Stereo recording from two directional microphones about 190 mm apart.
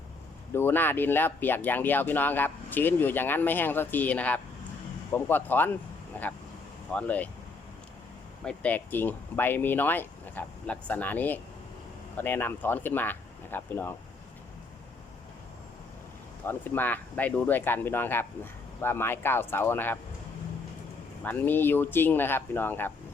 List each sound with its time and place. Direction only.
0.5 s speech: 10° left (ahead or behind)
8.4 s speech: 10° left (ahead or behind)
16.4 s speech: 10° left (ahead or behind)
21.2 s speech: 10° left (ahead or behind)